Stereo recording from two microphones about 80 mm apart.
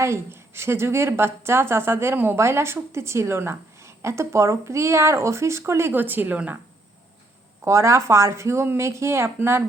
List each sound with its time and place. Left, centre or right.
0.0 s a woman's voice: right
7.6 s a woman's voice: right